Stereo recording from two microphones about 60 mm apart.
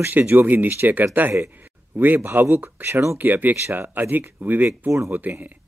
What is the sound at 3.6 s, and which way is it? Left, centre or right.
Speech, right.